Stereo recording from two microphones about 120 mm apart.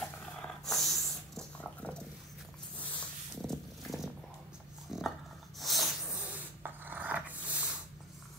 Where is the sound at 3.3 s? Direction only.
Centre (ahead or behind).